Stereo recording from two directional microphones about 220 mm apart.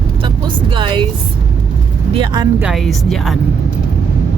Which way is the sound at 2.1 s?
20° right (ahead or behind).